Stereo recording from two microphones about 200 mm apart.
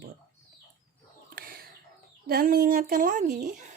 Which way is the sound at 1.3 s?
45° right (ahead or behind).